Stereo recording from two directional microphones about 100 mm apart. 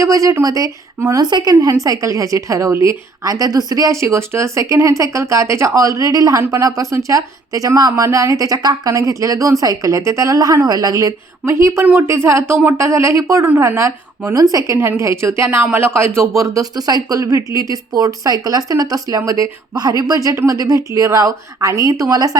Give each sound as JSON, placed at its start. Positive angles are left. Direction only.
{"t": 0.0, "sound": "a woman's voice", "side_deg": -35}
{"t": 16.4, "sound": "a woman's voice", "side_deg": -35}